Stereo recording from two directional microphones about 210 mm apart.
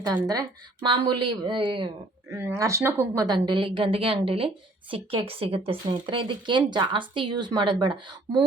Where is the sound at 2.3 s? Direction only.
10° right (ahead or behind).